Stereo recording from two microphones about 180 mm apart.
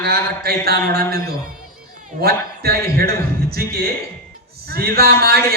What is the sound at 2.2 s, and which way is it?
Speech, 60° right (ahead or behind).